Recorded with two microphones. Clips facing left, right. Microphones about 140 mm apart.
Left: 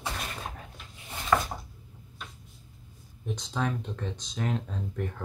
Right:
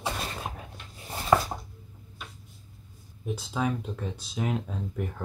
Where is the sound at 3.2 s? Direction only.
5° right (ahead or behind).